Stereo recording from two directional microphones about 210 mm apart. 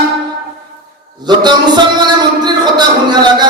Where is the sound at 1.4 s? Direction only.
20° right (ahead or behind).